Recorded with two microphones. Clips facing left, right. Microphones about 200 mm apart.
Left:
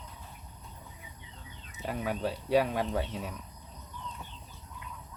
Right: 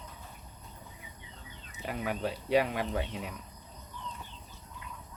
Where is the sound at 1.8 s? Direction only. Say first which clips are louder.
Left 1 dB; 40° left (ahead or behind).